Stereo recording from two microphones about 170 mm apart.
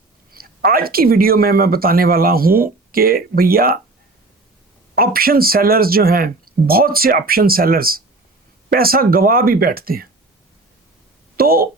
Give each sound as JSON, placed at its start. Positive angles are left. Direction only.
{"t": 0.3, "sound": "speech", "side_deg": -60}
{"t": 4.9, "sound": "speech", "side_deg": -60}
{"t": 11.3, "sound": "speech", "side_deg": -60}